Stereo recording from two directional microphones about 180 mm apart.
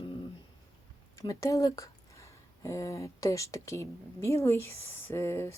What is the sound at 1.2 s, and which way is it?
Speech, 15° left (ahead or behind).